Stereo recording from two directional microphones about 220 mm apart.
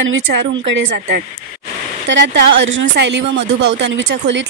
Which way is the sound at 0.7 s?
50° right (ahead or behind).